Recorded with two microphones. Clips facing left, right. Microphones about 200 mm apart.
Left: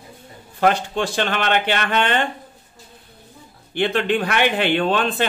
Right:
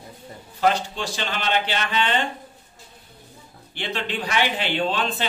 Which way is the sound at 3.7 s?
55° left (ahead or behind).